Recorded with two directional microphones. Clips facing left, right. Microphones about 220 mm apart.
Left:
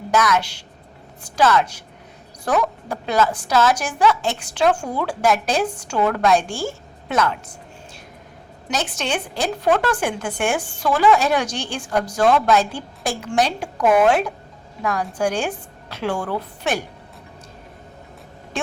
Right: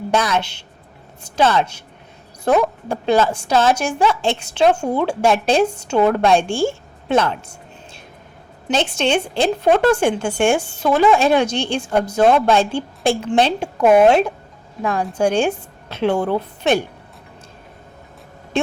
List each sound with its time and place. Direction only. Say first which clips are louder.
0.1 s a woman's voice: even; 30° right (ahead or behind)
8.6 s a woman's voice: right 7 dB; 25° right (ahead or behind)
18.5 s speech: right 6 dB; 25° right (ahead or behind)